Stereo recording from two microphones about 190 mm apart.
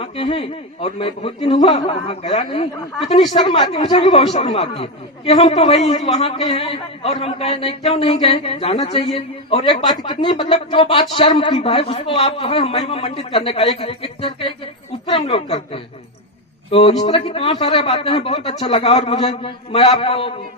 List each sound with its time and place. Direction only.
0.0 s speech: 30° left (ahead or behind)
17.0 s speech: 30° left (ahead or behind)